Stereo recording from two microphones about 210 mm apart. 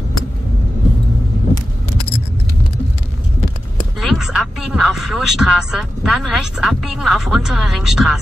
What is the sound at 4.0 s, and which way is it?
Speech, centre (ahead or behind).